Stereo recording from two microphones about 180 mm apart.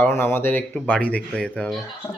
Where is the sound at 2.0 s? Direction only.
15° left (ahead or behind).